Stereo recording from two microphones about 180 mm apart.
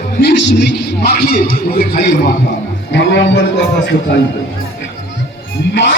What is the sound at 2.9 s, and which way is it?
Speech, 80° left.